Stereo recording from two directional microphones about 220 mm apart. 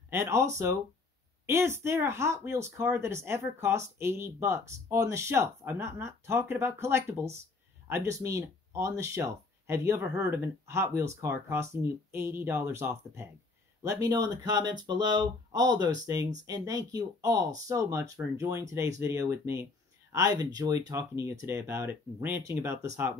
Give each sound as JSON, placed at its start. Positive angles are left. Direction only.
{"t": 0.1, "sound": "speech", "side_deg": -10}